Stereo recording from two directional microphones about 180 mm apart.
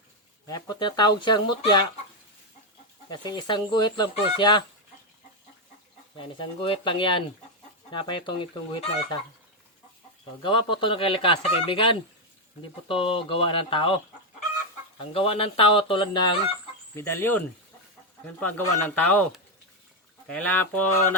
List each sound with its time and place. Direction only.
0.4 s speech: 20° left (ahead or behind)
3.1 s speech: 25° left (ahead or behind)
6.1 s speech: 25° left (ahead or behind)
10.4 s speech: 25° left (ahead or behind)
14.9 s speech: 30° left (ahead or behind)
16.9 s a sound: 15° left (ahead or behind)
20.2 s a sound: 5° left (ahead or behind)